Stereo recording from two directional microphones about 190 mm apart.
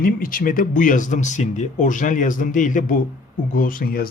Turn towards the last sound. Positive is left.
turn(degrees=50)  # may be behind; listen again after turning